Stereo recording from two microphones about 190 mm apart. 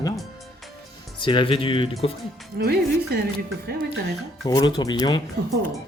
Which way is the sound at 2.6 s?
55° right (ahead or behind).